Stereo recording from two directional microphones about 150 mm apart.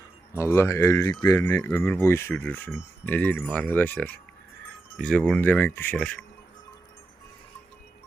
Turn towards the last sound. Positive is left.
turn(degrees=10)  # may be behind; listen again after turning